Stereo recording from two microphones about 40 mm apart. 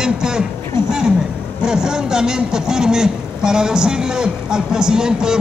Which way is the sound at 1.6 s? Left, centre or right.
Centre.